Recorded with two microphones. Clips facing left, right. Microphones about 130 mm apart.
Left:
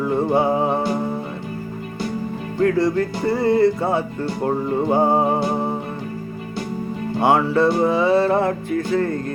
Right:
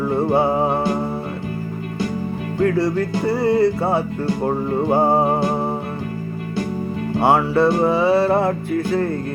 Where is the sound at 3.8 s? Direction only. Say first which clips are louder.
Right 1 dB; 35° right (ahead or behind).